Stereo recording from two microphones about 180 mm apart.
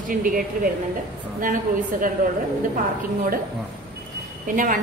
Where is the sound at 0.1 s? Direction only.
50° right (ahead or behind).